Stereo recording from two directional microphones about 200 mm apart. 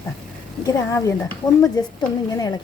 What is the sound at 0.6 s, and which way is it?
Speech, 15° left (ahead or behind).